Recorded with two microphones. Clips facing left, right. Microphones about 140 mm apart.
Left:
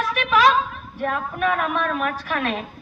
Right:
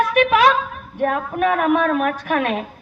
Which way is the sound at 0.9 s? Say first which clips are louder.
Right 5 dB; 55° right (ahead or behind).